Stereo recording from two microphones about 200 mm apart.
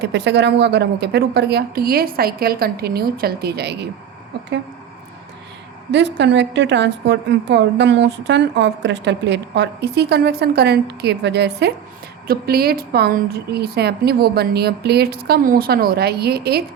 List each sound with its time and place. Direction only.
0.0 s a woman's voice: 55° right (ahead or behind)
5.9 s a woman's voice: 60° right (ahead or behind)